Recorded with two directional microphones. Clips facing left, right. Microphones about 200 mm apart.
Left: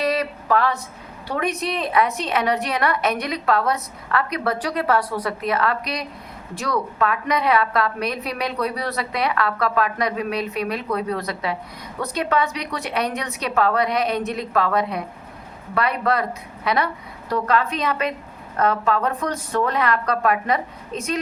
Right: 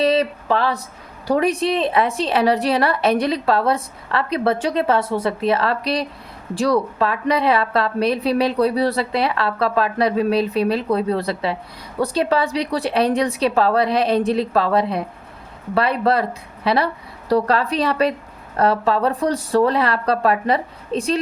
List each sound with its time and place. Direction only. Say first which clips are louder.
0.0 s a woman's voice: right 5 dB; 25° right (ahead or behind)